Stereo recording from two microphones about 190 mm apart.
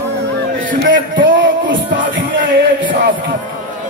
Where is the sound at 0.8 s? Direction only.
75° right (ahead or behind).